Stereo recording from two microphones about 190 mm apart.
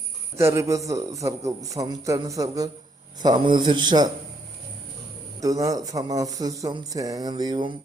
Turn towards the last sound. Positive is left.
turn(degrees=-25)  # may be behind; listen again after turning